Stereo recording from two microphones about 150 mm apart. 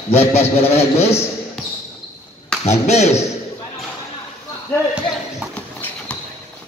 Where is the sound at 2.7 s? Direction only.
50° left (ahead or behind).